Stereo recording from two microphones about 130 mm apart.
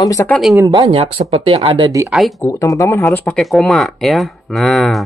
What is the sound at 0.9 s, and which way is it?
Speech, 50° right (ahead or behind).